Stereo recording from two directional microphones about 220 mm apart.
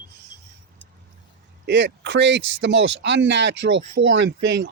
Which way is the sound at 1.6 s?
55° right (ahead or behind).